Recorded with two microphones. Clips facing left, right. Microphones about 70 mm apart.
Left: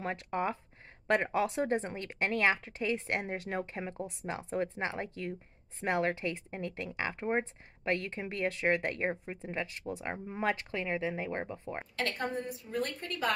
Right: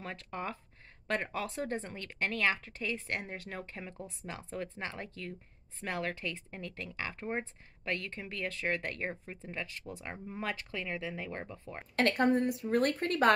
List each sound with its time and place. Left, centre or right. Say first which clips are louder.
0.0 s speech: left 6 dB; left
12.0 s a woman's voice: right 8 dB; right